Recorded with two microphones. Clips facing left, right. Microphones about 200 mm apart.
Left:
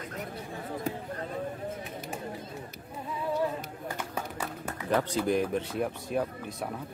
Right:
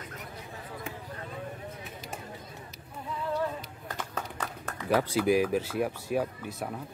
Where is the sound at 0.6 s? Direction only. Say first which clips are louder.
Left 8 dB; 45° left (ahead or behind).